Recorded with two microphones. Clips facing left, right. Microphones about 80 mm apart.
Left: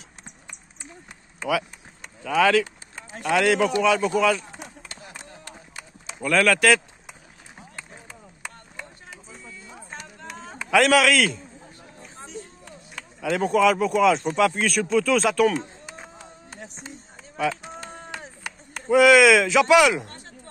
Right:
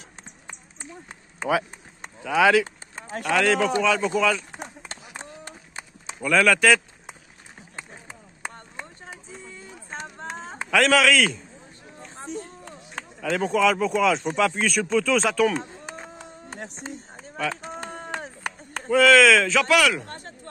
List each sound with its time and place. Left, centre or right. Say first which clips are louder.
0.5 s run: right 6 dB; right
2.2 s speech: right 1 dB; centre
2.6 s a sound: even; right
3.3 s speech: left 1 dB; centre
4.6 s run: right 3 dB; right
6.2 s speech: even; centre
7.7 s a sound: right 3 dB; right
10.7 s speech: left 1 dB; centre
12.2 s a sound: right 5 dB; right
13.2 s speech: left 2 dB; centre
15.5 s run: even; right
17.6 s chop: right 3 dB; right
18.9 s speech: left 1 dB; centre
20.1 s a sound: right 5 dB; right